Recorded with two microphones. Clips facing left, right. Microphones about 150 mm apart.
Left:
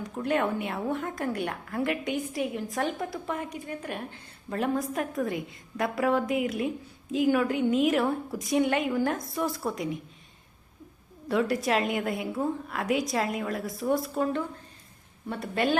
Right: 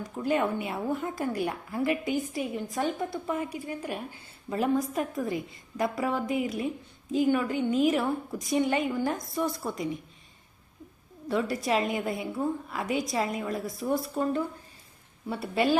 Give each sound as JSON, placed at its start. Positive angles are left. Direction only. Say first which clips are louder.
{"t": 0.0, "sound": "a woman's voice", "louder": "even", "side_deg": 0}
{"t": 11.3, "sound": "a woman's voice", "louder": "left 2 dB", "side_deg": 0}